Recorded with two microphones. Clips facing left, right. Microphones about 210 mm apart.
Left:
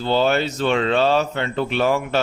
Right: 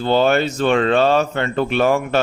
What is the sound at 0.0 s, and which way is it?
Speech, 50° right (ahead or behind).